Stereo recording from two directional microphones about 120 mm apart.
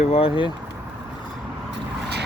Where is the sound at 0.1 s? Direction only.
55° left (ahead or behind).